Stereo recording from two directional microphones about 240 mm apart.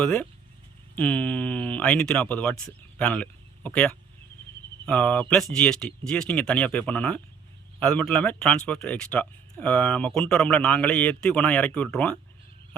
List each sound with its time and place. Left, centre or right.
0.0 s speech: centre